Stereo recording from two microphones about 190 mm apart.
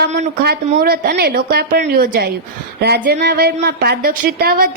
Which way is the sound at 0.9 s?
50° right (ahead or behind).